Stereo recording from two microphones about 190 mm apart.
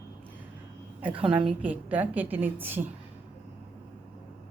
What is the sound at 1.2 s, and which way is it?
Speech, 25° right (ahead or behind).